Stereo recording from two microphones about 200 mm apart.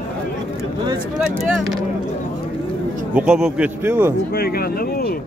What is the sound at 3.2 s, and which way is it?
Speech, 5° right (ahead or behind).